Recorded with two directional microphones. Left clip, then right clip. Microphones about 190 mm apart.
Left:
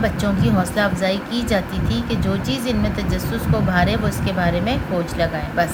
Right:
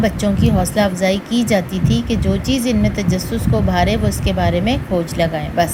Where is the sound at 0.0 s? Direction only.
15° right (ahead or behind).